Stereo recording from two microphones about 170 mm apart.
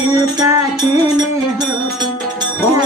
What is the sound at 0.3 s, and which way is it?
Music, 15° right (ahead or behind).